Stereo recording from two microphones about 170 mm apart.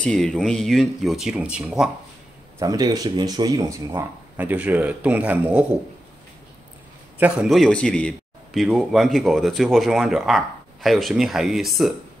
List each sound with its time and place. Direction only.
0.0 s a man's voice: 5° left (ahead or behind)
2.6 s speech: 20° right (ahead or behind)
7.2 s a man's voice: 5° right (ahead or behind)